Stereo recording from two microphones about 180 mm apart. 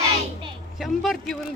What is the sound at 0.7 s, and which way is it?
Speech, centre (ahead or behind).